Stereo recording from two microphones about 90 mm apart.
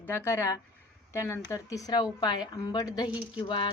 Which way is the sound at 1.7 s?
45° left (ahead or behind).